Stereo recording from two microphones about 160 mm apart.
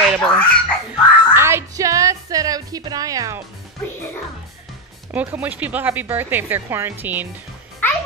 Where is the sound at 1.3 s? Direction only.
15° right (ahead or behind).